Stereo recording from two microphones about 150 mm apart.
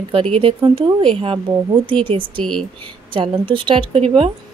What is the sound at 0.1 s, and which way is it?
Speech, 40° right (ahead or behind).